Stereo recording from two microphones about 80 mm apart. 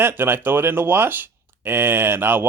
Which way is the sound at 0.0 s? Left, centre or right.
Right.